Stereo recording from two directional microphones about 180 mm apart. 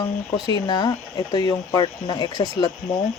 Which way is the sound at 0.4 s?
25° left (ahead or behind).